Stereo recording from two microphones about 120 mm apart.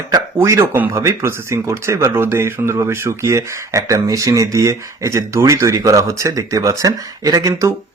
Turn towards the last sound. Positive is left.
turn(degrees=-30)  # may be behind; listen again after turning